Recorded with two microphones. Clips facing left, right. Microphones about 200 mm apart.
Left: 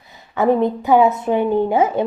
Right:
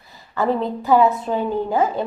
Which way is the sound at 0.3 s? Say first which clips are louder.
Left 5 dB; 20° left (ahead or behind).